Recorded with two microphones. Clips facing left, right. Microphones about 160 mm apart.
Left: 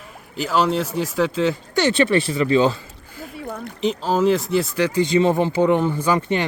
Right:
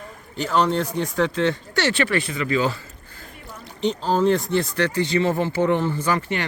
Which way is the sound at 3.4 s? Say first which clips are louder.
Left 2 dB; 60° left (ahead or behind).